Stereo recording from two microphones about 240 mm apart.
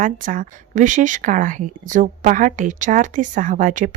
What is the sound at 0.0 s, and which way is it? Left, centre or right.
A woman's voice, right.